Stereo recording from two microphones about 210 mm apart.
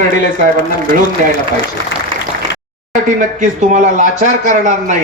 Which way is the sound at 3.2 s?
35° right (ahead or behind).